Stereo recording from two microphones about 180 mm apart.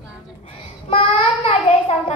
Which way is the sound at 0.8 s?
30° left (ahead or behind).